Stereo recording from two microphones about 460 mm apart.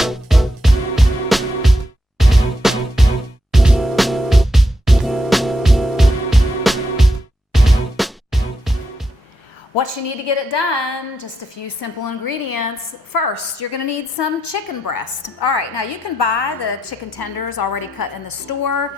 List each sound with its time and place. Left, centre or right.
0.0 s music: centre
9.7 s a woman's voice: left
17.1 s a woman's voice: left